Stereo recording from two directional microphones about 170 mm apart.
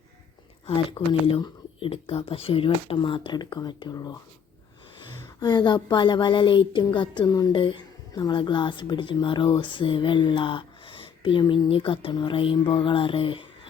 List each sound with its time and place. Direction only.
0.7 s speech: 30° left (ahead or behind)